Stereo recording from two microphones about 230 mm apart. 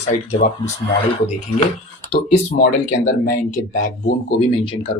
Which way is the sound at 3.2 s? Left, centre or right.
Left.